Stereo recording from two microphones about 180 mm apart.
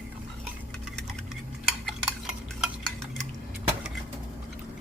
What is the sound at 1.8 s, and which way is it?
Stir, centre (ahead or behind).